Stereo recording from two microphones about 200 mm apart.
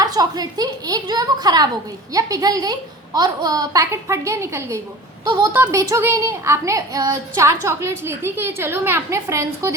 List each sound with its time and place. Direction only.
0.0 s a woman's voice: 20° right (ahead or behind)